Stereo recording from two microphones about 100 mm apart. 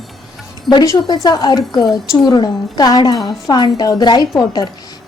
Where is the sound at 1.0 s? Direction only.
45° left (ahead or behind).